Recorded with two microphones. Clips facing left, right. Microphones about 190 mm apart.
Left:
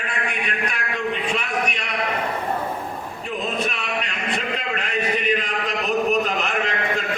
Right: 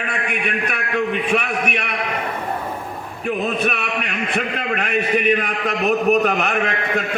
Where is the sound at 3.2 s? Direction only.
60° right (ahead or behind).